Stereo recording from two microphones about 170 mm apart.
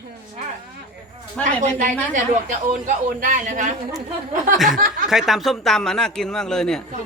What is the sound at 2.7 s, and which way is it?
A man's voice, 55° right (ahead or behind).